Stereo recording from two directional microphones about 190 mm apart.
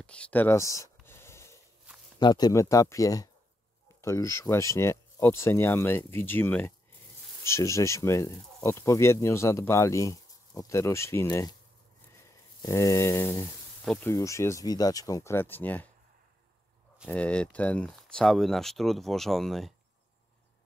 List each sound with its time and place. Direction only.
0.0 s a sound: 5° left (ahead or behind)
2.1 s speech: 20° left (ahead or behind)
12.6 s speech: 15° left (ahead or behind)
17.0 s speech: 5° left (ahead or behind)